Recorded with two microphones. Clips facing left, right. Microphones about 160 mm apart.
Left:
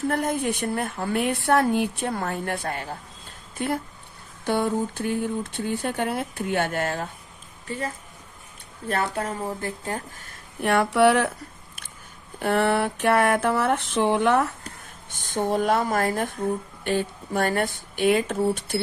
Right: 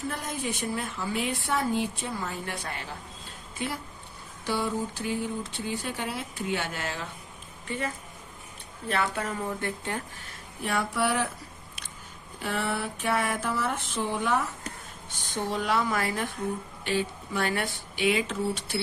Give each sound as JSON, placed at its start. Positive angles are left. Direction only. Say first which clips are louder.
{"t": 0.1, "sound": "a woman's voice", "louder": "left 8 dB", "side_deg": 60}
{"t": 7.7, "sound": "a woman's voice", "louder": "left 2 dB", "side_deg": 40}
{"t": 8.9, "sound": "a woman's voice", "louder": "left 3 dB", "side_deg": 40}
{"t": 10.6, "sound": "a woman's voice", "louder": "left 9 dB", "side_deg": 65}
{"t": 12.4, "sound": "a woman's voice", "louder": "left 9 dB", "side_deg": 65}
{"t": 15.1, "sound": "speech", "louder": "left 7 dB", "side_deg": 50}